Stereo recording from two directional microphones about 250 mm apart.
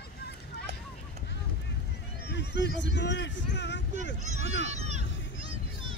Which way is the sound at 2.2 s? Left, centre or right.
Left.